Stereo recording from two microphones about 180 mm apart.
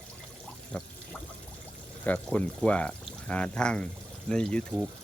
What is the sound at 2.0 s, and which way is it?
Speech, 10° left (ahead or behind).